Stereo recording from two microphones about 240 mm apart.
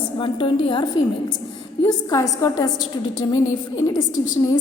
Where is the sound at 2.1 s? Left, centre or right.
Centre.